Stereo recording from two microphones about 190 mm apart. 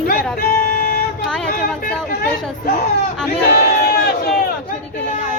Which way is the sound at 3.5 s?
55° left (ahead or behind).